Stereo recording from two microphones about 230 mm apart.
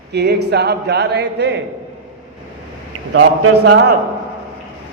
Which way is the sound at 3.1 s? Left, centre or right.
Right.